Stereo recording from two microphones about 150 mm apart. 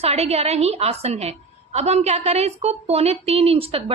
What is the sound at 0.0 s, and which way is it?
A woman's voice, 45° right (ahead or behind).